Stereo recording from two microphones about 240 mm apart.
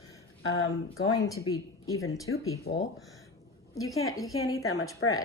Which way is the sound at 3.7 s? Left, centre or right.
Centre.